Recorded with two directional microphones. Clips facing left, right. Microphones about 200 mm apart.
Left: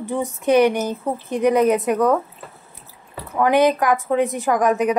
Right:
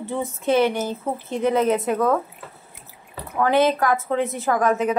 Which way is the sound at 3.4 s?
15° left (ahead or behind).